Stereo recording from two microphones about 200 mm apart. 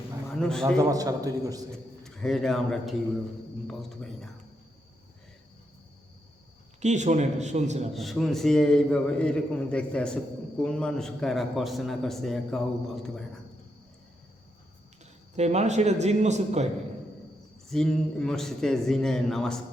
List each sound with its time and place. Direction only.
0.3 s a man's voice: 5° left (ahead or behind)
0.8 s a man's voice: 20° right (ahead or behind)
1.7 s a man's voice: centre (ahead or behind)
6.7 s speech: 35° right (ahead or behind)
7.9 s a man's voice: centre (ahead or behind)
15.4 s speech: 35° right (ahead or behind)
17.7 s a man's voice: 5° left (ahead or behind)